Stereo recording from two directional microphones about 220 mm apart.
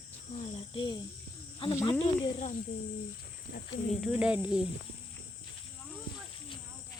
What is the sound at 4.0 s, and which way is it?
Speech, 5° right (ahead or behind).